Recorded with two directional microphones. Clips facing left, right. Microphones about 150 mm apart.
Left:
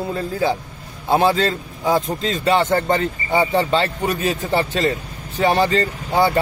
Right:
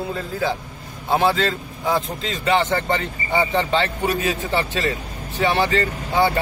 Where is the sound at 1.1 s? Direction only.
40° left (ahead or behind).